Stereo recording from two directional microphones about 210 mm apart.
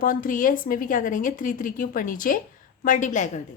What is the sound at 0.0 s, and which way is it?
A woman's voice, 40° left (ahead or behind).